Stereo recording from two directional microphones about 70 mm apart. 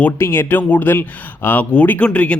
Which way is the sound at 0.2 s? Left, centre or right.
Left.